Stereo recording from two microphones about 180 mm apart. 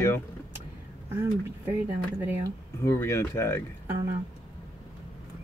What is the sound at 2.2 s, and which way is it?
Speech, 10° right (ahead or behind).